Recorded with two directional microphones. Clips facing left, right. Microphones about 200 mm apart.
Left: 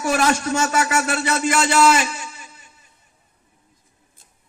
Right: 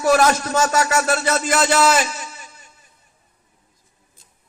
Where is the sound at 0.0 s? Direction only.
45° right (ahead or behind).